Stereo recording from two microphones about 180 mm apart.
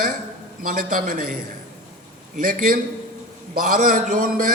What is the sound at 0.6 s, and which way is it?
Speech, 50° right (ahead or behind).